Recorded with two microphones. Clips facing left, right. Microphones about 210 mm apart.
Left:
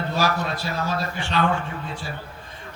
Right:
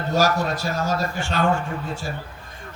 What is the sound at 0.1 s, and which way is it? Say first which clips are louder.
A man's voice: right 6 dB; 45° right (ahead or behind).